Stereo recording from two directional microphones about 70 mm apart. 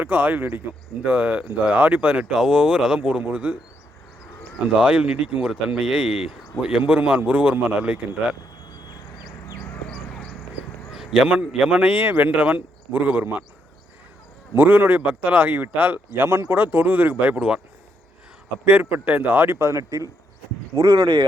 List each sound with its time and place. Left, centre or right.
0.0 s a man's voice: right
4.8 s speech: centre
10.9 s a man's voice: centre; by 13.4 s right
14.5 s a man's voice: right
16.2 s a man's voice: right; by 17.6 s centre
18.6 s a man's voice: right